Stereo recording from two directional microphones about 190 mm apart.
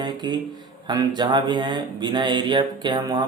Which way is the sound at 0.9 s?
20° right (ahead or behind).